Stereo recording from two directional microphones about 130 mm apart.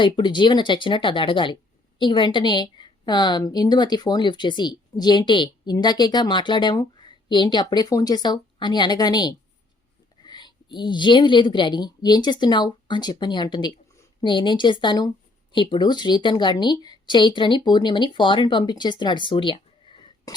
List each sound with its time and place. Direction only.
0.0 s a woman's voice: 35° left (ahead or behind)